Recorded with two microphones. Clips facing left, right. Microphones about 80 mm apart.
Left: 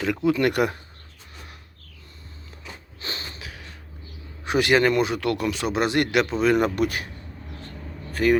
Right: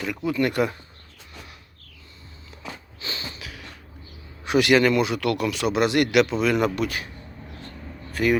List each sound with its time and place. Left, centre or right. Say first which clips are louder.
0.3 s speech: left 1 dB; left
3.0 s a sound: even; left
4.4 s speech: right 1 dB; left
8.1 s speech: left 2 dB; left